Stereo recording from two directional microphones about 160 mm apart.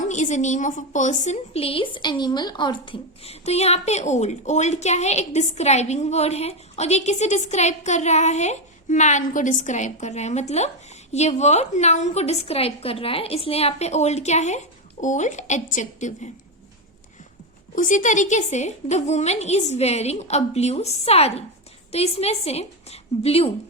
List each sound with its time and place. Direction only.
0.0 s a woman's voice: 50° left (ahead or behind)
17.7 s a woman's voice: 50° left (ahead or behind)